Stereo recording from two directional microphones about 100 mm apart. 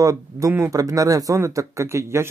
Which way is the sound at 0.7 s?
35° right (ahead or behind).